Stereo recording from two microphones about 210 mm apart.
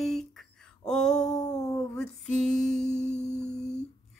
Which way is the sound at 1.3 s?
15° left (ahead or behind).